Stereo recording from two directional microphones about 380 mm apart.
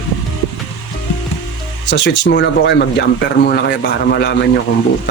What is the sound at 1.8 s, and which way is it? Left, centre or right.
Speech, left.